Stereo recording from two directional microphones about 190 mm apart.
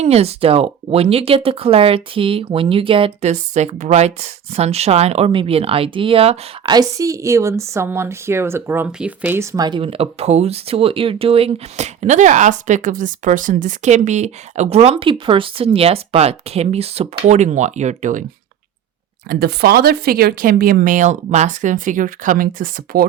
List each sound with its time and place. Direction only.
0.0 s speech: 35° right (ahead or behind)
19.3 s speech: 55° right (ahead or behind)